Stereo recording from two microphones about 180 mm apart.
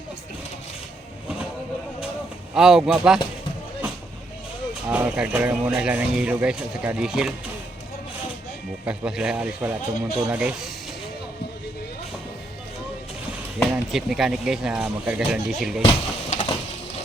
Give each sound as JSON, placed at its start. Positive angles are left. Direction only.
{"t": 2.6, "sound": "speech", "side_deg": -5}
{"t": 4.9, "sound": "speech", "side_deg": -5}
{"t": 8.8, "sound": "speech", "side_deg": -5}
{"t": 13.6, "sound": "speech", "side_deg": 0}
{"t": 15.8, "sound": "speech", "side_deg": 30}